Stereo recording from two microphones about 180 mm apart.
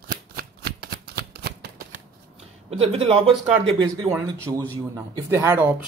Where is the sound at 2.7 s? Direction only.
35° right (ahead or behind).